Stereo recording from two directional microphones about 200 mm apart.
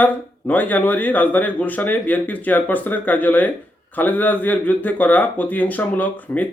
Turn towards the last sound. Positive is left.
turn(degrees=10)  # may be behind; listen again after turning